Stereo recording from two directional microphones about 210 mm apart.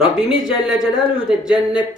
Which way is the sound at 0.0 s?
5° right (ahead or behind).